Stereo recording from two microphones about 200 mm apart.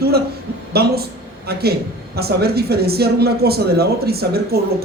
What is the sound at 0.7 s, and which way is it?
Speech, 50° right (ahead or behind).